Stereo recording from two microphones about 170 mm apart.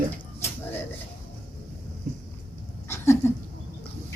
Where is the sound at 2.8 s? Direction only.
15° left (ahead or behind).